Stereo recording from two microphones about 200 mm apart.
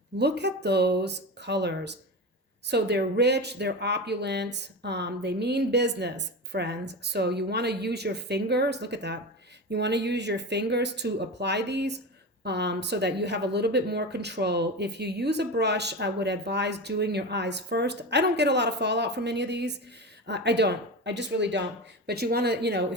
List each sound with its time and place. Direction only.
0.2 s speech: 55° right (ahead or behind)